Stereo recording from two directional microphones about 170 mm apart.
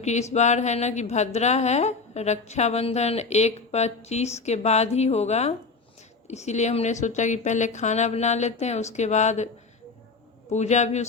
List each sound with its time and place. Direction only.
0.0 s a sound: 40° left (ahead or behind)
0.3 s a woman's voice: 40° left (ahead or behind)
10.5 s a woman's voice: 40° left (ahead or behind)